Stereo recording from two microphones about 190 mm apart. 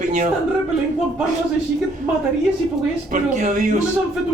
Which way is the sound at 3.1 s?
40° right (ahead or behind).